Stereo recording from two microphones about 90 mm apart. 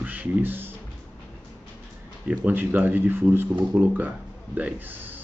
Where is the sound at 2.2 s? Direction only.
15° right (ahead or behind).